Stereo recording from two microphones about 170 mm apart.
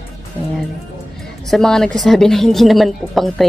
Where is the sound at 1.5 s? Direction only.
5° left (ahead or behind).